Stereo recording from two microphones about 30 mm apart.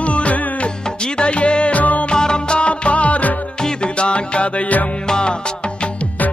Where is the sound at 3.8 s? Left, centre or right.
Left.